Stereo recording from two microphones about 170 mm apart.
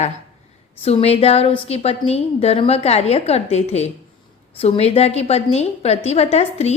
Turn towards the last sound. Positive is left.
turn(degrees=40)  # may be behind; listen again after turning